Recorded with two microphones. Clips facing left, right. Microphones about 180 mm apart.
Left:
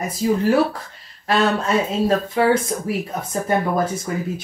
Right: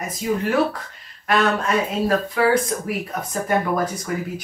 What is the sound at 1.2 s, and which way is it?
Speech, 30° left (ahead or behind).